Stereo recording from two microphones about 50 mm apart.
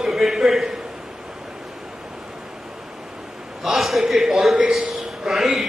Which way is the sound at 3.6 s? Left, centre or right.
Centre.